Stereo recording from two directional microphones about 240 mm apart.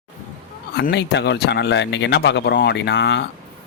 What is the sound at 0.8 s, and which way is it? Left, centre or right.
Speech, left.